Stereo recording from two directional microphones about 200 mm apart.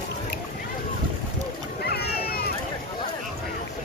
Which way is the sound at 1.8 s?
50° left (ahead or behind).